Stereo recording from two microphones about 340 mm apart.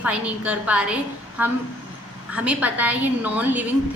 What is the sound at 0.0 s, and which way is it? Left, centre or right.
A woman's voice, centre.